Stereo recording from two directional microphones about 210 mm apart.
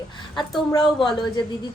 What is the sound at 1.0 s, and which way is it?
Speech, centre (ahead or behind).